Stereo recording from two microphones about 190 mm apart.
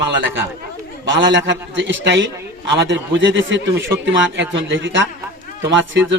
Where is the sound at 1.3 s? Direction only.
70° right (ahead or behind).